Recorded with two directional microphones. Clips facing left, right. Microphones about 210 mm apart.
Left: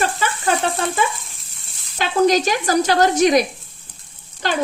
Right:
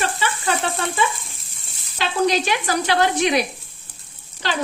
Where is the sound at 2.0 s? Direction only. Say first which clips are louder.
Left 4 dB; 45° left (ahead or behind).